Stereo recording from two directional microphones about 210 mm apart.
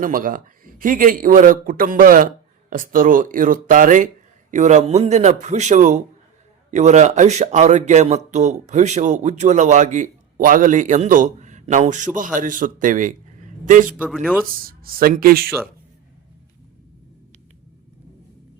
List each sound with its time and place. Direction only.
0.0 s speech: 40° right (ahead or behind)
13.9 s speech: centre (ahead or behind)
14.6 s speech: 45° right (ahead or behind)
15.4 s speech: centre (ahead or behind)